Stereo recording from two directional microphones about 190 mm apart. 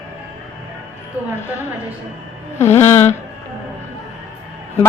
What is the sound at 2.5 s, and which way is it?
Speech, 15° left (ahead or behind).